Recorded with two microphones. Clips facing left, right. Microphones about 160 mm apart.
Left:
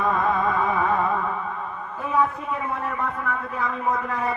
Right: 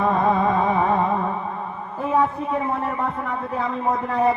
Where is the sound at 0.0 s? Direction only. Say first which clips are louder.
Right 3 dB; 30° right (ahead or behind).